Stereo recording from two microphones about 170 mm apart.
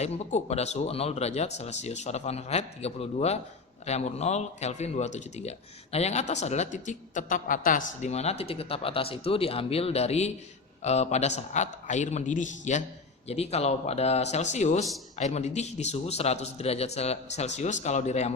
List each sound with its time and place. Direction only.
0.0 s a man's voice: 40° left (ahead or behind)